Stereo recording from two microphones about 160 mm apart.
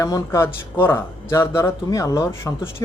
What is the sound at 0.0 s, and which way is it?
Speech, 20° left (ahead or behind).